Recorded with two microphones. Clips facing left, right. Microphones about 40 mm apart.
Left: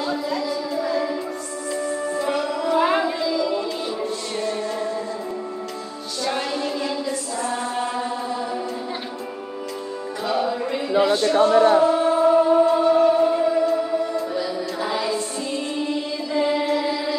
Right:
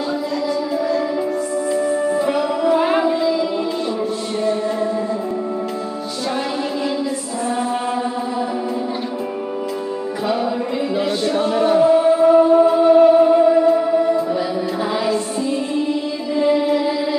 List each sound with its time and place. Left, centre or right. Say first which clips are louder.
0.7 s music: right 3 dB; centre
1.7 s music: right 5 dB; centre
3.3 s music: right 2 dB; centre
4.4 s chant: right 7 dB; centre
7.4 s music: right 6 dB; centre
10.2 s music: right 2 dB; centre
10.9 s a sound: left 4 dB; centre
12.8 s music: right 6 dB; centre
16.3 s music: right 4 dB; centre